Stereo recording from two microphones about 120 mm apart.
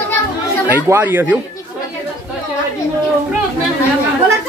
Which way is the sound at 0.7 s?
15° right (ahead or behind).